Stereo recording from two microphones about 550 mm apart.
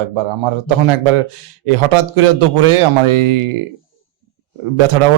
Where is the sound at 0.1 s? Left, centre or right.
Right.